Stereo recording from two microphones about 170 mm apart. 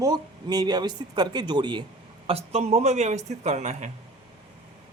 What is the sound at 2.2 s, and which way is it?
Speech, 35° right (ahead or behind).